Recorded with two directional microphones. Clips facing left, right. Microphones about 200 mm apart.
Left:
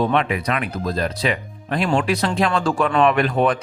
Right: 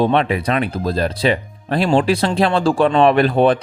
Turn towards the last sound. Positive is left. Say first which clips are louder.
# right 5 dB
turn(degrees=-30)  # may be behind; listen again after turning